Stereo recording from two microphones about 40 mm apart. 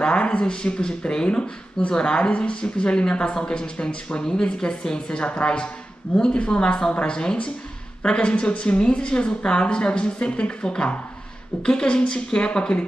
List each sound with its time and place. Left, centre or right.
0.0 s speech: left